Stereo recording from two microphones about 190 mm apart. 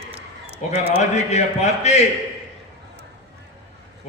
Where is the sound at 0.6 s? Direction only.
40° left (ahead or behind).